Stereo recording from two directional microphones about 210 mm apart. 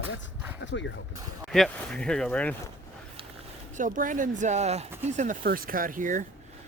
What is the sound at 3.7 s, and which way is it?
Speech, 40° right (ahead or behind).